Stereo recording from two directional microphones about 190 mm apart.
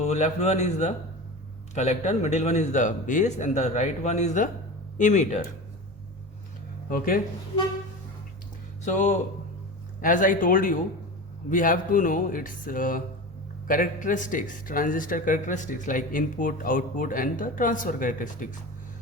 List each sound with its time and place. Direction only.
0.0 s speech: 35° left (ahead or behind)
6.9 s speech: 50° left (ahead or behind)
8.8 s speech: 40° left (ahead or behind)